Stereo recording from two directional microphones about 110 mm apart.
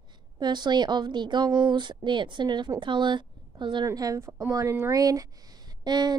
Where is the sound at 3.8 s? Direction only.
30° right (ahead or behind).